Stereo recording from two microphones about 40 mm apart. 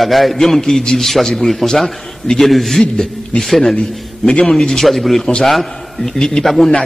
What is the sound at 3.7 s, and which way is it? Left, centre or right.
Speech, left.